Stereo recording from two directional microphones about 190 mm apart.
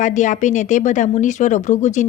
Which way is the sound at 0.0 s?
40° left (ahead or behind).